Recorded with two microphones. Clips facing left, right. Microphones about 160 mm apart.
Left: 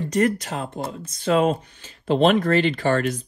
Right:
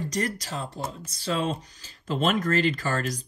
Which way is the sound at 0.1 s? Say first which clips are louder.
Left 8 dB; 35° right (ahead or behind).